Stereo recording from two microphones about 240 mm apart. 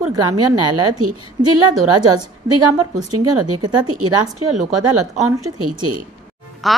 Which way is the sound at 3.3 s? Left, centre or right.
Right.